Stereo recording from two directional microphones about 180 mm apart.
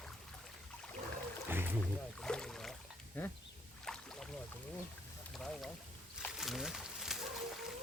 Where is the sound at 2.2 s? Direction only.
5° left (ahead or behind).